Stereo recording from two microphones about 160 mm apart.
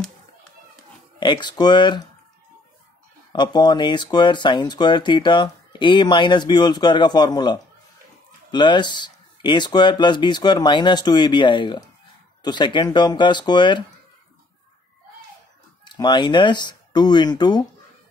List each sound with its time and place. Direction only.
1.2 s speech: 30° left (ahead or behind)
3.3 s speech: 25° left (ahead or behind)
15.8 s speech: 25° left (ahead or behind)